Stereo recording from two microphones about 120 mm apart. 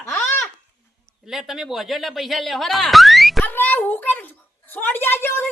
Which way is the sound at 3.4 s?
15° left (ahead or behind).